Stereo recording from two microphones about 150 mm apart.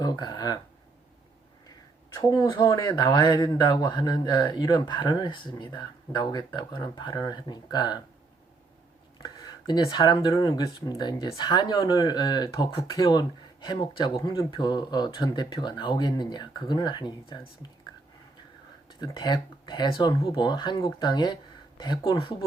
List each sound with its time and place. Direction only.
0.0 s speech: 25° left (ahead or behind)
2.1 s speech: 25° left (ahead or behind)
9.2 s speech: 30° left (ahead or behind)
18.9 s speech: 30° left (ahead or behind)